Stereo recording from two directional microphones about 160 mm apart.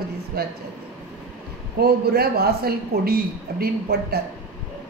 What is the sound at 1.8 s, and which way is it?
A woman's voice, 75° right (ahead or behind).